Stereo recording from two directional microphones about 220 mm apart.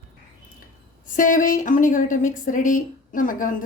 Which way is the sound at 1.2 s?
35° left (ahead or behind).